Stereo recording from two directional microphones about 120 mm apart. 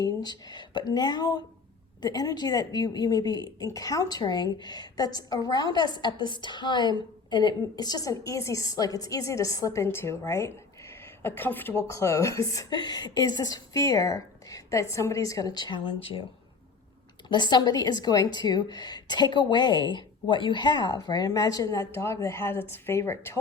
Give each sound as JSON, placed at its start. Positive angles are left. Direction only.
{"t": 0.0, "sound": "a woman's voice", "side_deg": 35}
{"t": 16.0, "sound": "speech", "side_deg": 50}
{"t": 17.2, "sound": "a woman's voice", "side_deg": 40}